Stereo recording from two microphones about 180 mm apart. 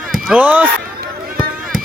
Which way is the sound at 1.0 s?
55° right (ahead or behind).